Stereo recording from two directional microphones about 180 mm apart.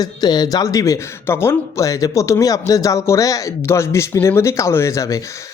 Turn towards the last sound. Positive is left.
turn(degrees=20)  # may be behind; listen again after turning